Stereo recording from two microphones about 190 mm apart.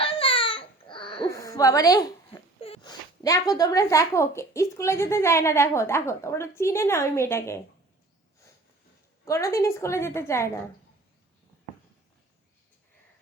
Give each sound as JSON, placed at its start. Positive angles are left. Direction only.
{"t": 0.0, "sound": "baby cry", "side_deg": 30}
{"t": 1.3, "sound": "a sound", "side_deg": 15}
{"t": 2.6, "sound": "speech", "side_deg": 30}
{"t": 9.2, "sound": "speech", "side_deg": 15}